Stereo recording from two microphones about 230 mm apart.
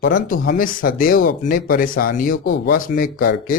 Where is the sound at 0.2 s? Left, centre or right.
Left.